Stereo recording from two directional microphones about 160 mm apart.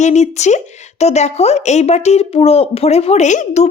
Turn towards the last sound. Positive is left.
turn(degrees=45)  # may be behind; listen again after turning